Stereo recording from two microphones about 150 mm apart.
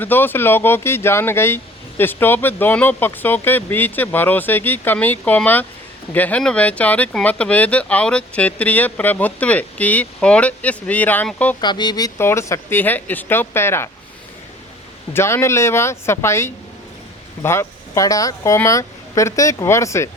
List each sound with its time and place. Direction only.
0.0 s speech: 15° left (ahead or behind)
11.6 s speech: 30° left (ahead or behind)
15.1 s speech: 15° left (ahead or behind)